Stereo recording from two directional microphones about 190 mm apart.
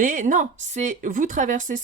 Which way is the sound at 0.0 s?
45° right (ahead or behind).